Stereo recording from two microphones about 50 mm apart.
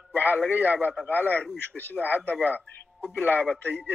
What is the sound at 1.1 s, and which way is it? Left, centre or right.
Speech, left.